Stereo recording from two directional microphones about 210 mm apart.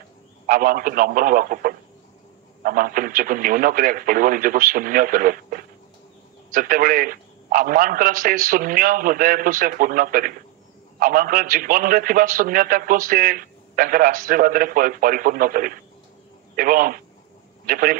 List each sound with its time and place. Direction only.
0.5 s a man's voice: 40° right (ahead or behind)